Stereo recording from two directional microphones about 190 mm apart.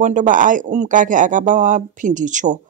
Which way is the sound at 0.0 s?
40° right (ahead or behind).